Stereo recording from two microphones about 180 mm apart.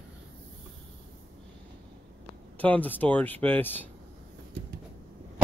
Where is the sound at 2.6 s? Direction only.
10° left (ahead or behind).